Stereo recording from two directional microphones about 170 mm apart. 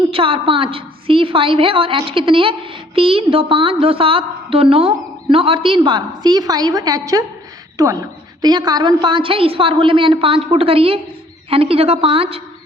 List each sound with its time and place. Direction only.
0.1 s a woman's voice: 30° right (ahead or behind)